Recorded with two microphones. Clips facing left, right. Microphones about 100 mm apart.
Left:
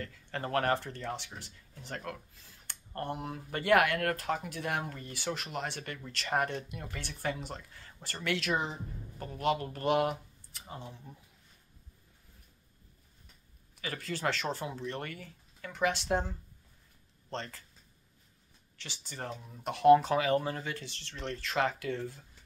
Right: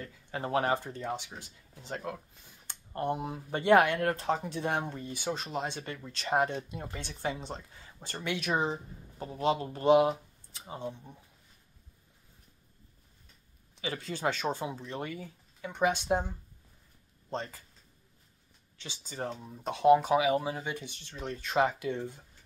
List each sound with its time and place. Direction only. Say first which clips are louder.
0.0 s speech: right 1 dB; 15° right (ahead or behind)
13.7 s speech: right 2 dB; 20° right (ahead or behind)
18.8 s speech: right 4 dB; 15° right (ahead or behind)